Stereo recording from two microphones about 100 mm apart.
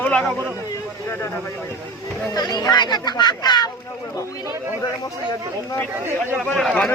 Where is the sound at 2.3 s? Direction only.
45° left (ahead or behind).